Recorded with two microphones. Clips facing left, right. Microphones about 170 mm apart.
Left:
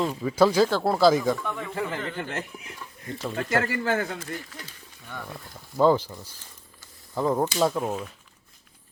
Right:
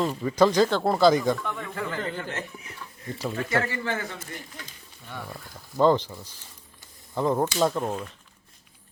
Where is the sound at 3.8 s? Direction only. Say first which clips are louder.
Left 4 dB; 55° left (ahead or behind).